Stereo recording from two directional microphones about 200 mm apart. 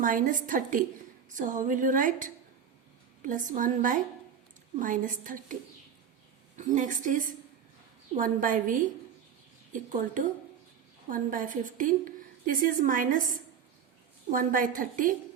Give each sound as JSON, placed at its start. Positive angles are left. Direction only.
{"t": 0.0, "sound": "a woman's voice", "side_deg": -45}
{"t": 6.6, "sound": "a woman's voice", "side_deg": -40}